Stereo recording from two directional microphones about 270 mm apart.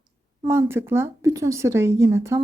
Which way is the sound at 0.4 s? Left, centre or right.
Centre.